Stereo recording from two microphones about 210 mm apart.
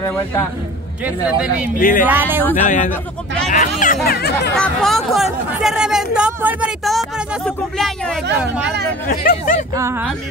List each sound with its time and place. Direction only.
0.0 s a man's voice: 10° left (ahead or behind)
1.0 s speech: 5° right (ahead or behind)
1.8 s speech: 40° left (ahead or behind)
2.0 s speech: 10° right (ahead or behind)
2.5 s speech: 35° left (ahead or behind)
4.6 s speech: centre (ahead or behind)
9.0 s speech: 45° left (ahead or behind)